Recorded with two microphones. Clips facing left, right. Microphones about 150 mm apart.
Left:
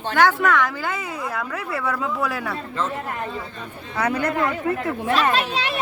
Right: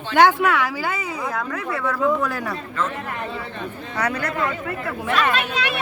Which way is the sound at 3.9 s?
10° left (ahead or behind).